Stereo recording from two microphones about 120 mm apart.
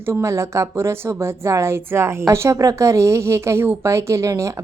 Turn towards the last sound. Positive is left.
turn(degrees=-25)  # may be behind; listen again after turning